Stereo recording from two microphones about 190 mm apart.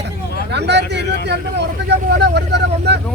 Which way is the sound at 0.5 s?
60° right (ahead or behind).